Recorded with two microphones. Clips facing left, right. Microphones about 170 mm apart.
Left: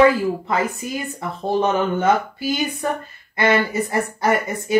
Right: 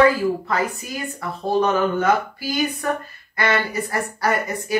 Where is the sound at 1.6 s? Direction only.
25° left (ahead or behind).